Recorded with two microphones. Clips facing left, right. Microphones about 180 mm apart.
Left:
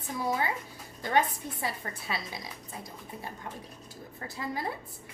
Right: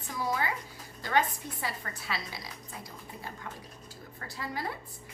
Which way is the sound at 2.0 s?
20° left (ahead or behind).